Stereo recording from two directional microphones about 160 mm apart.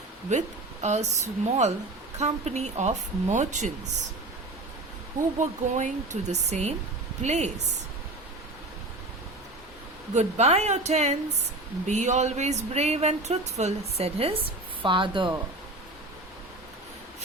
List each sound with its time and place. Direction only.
0.3 s speech: 45° right (ahead or behind)
5.7 s speech: 50° right (ahead or behind)
10.2 s speech: 45° right (ahead or behind)